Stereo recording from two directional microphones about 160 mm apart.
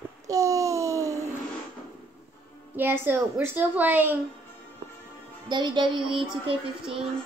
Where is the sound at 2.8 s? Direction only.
15° right (ahead or behind).